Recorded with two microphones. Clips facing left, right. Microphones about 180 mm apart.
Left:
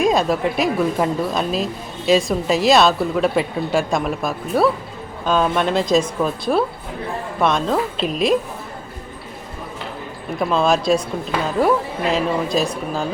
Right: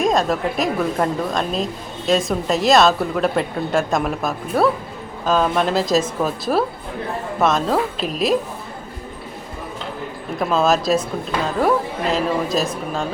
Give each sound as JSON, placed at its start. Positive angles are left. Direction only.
{"t": 0.0, "sound": "speech", "side_deg": 0}
{"t": 10.3, "sound": "speech", "side_deg": 0}